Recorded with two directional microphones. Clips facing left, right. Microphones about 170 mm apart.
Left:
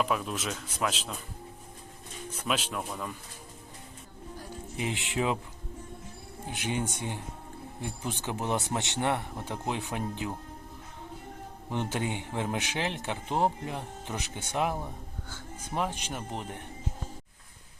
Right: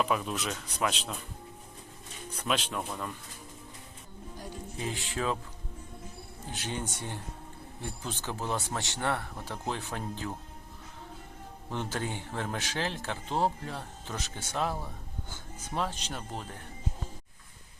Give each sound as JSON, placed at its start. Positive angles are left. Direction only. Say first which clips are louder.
{"t": 0.0, "sound": "a man's voice", "louder": "even", "side_deg": 0}
{"t": 2.3, "sound": "a man's voice", "louder": "even", "side_deg": 5}
{"t": 4.8, "sound": "a man's voice", "louder": "left 3 dB", "side_deg": 20}
{"t": 6.4, "sound": "a man's voice", "louder": "left 4 dB", "side_deg": 15}
{"t": 11.7, "sound": "a man's voice", "louder": "left 3 dB", "side_deg": 15}